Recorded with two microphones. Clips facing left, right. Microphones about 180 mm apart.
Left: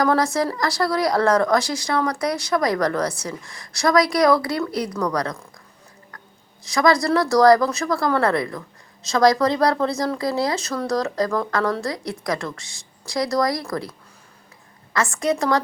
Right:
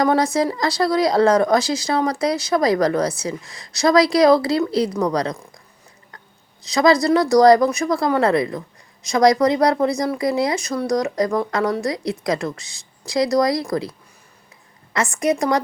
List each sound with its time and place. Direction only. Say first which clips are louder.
0.0 s speech: right 2 dB; 20° right (ahead or behind)
6.6 s speech: right 3 dB; 20° right (ahead or behind)
14.9 s a woman's voice: right 2 dB; 15° right (ahead or behind)